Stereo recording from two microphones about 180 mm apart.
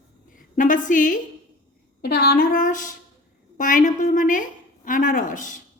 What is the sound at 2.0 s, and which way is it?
A woman's voice, 65° left (ahead or behind).